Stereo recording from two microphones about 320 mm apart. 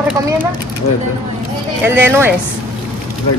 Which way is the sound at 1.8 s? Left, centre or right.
Centre.